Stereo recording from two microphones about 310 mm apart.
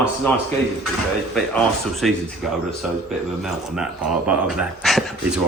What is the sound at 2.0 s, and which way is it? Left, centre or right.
Speech, centre.